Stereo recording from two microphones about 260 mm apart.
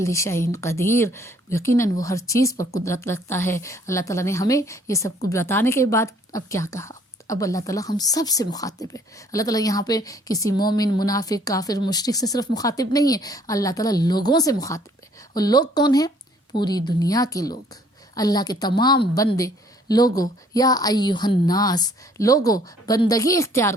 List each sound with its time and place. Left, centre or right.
0.0 s speech: centre